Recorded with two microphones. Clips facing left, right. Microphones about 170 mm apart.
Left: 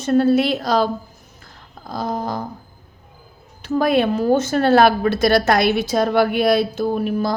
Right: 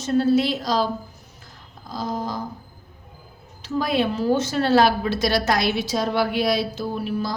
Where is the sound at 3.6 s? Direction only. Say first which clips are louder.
Left 5 dB; 55° left (ahead or behind).